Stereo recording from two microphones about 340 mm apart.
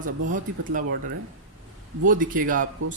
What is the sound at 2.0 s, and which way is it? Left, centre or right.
Speech, right.